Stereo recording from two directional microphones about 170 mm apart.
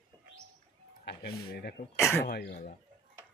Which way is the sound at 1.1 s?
65° left (ahead or behind).